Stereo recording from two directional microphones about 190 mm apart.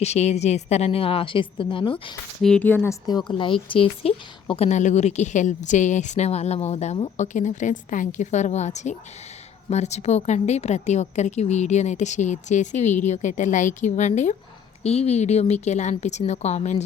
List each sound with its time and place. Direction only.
0.0 s a woman's voice: 35° left (ahead or behind)
2.4 s a woman's voice: 5° left (ahead or behind); by 16.8 s 35° left (ahead or behind)